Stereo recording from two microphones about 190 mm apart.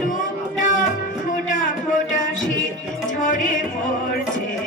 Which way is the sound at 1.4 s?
40° left (ahead or behind).